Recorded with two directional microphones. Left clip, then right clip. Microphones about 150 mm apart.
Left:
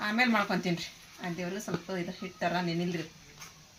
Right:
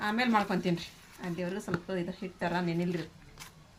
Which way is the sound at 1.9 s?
Centre (ahead or behind).